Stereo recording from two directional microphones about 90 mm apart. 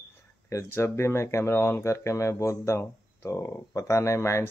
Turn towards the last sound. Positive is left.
turn(degrees=30)  # may be behind; listen again after turning